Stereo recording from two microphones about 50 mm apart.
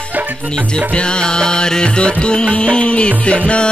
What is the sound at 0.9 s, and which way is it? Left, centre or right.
Music, centre.